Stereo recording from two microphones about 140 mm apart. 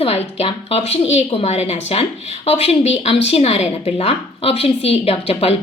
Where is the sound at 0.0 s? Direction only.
50° left (ahead or behind).